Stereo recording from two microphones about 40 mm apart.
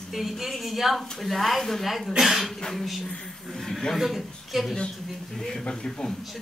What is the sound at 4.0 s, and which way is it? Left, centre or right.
Speech, centre.